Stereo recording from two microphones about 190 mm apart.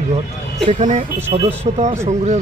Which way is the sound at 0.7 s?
40° right (ahead or behind).